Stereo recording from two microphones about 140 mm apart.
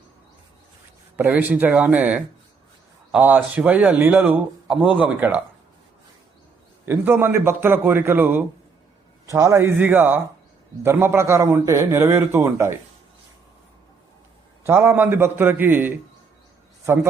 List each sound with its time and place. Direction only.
1.1 s speech: 10° right (ahead or behind)
6.8 s speech: 15° right (ahead or behind)
14.6 s a man's voice: 15° right (ahead or behind)